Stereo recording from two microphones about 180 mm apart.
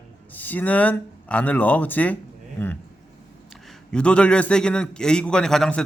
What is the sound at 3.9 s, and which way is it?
A man's voice, 5° left (ahead or behind).